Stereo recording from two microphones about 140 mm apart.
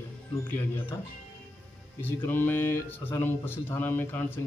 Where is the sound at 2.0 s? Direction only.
15° left (ahead or behind).